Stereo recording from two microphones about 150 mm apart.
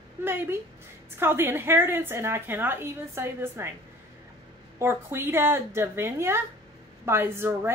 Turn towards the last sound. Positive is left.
turn(degrees=-15)  # may be behind; listen again after turning